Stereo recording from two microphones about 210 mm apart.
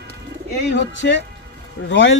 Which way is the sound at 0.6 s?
55° left (ahead or behind).